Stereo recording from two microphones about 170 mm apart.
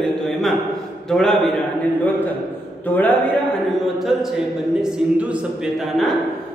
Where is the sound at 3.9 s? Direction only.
Centre (ahead or behind).